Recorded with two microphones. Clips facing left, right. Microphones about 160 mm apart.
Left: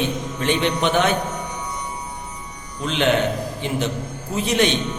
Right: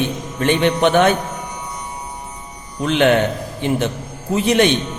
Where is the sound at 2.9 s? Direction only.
55° right (ahead or behind).